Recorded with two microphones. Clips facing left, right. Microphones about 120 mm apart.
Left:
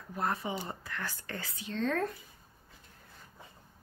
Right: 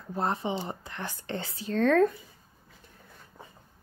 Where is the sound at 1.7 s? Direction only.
70° right (ahead or behind).